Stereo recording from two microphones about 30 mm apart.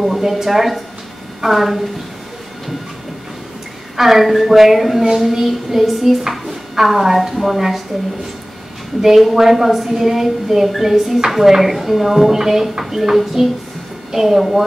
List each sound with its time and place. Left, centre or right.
0.2 s speech: centre
3.9 s speech: centre
9.0 s speech: centre